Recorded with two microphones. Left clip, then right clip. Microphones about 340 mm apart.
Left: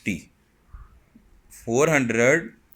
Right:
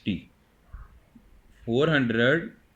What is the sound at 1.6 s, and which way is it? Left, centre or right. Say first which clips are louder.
Speech: left 3 dB; left.